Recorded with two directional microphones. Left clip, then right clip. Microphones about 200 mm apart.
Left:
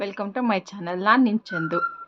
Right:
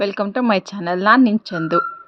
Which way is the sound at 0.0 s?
25° right (ahead or behind).